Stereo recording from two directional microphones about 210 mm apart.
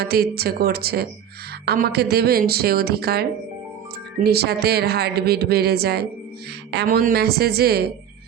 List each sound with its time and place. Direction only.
0.0 s speech: 50° right (ahead or behind)